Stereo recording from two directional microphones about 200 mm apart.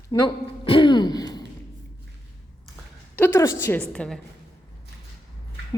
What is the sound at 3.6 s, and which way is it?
Speech, 10° left (ahead or behind).